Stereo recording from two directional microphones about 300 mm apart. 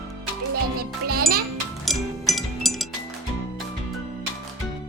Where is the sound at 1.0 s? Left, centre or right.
Right.